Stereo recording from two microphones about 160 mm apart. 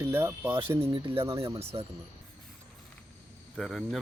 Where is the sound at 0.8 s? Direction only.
35° right (ahead or behind).